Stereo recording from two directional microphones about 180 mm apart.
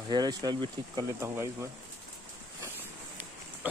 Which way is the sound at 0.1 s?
20° right (ahead or behind).